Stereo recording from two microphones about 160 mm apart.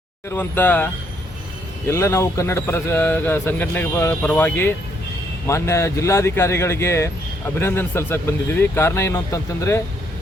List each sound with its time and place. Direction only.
0.3 s speech: 10° left (ahead or behind)
1.9 s speech: 15° left (ahead or behind)